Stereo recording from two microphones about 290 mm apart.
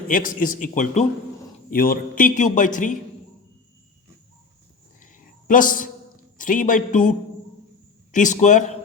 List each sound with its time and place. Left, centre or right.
0.1 s a man's voice: left
4.9 s a sound: left
6.3 s speech: left
8.1 s a man's voice: left